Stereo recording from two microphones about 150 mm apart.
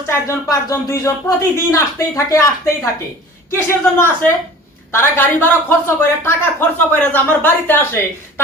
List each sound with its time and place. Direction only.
0.1 s speech: 20° left (ahead or behind)